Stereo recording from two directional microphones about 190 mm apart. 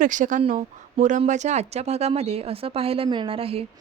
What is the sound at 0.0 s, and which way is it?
A woman's voice, 45° right (ahead or behind).